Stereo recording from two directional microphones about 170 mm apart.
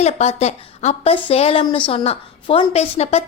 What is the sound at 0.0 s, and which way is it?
A woman's voice, 40° left (ahead or behind).